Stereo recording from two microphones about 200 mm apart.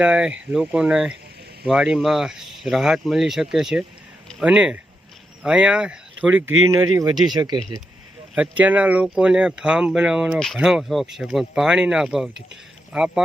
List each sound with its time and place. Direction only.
0.0 s speech: 5° right (ahead or behind); by 7.6 s 20° right (ahead or behind)
8.4 s speech: 5° right (ahead or behind)